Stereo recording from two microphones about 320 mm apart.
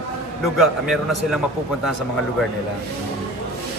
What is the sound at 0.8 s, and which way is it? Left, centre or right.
Speech, centre.